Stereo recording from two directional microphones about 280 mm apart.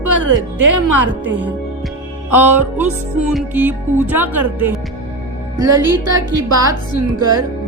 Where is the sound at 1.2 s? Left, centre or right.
Right.